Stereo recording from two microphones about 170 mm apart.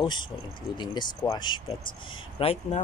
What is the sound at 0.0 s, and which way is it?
Speech, 25° left (ahead or behind).